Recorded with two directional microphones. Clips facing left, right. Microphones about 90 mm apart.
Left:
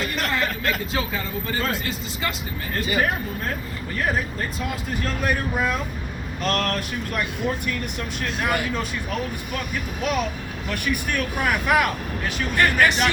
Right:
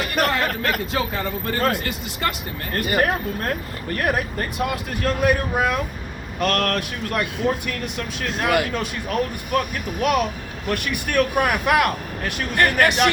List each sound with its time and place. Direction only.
0.0 s speech: 60° right (ahead or behind); by 7.3 s 85° right
8.4 s speech: 75° right (ahead or behind)
9.5 s speech: 60° right (ahead or behind)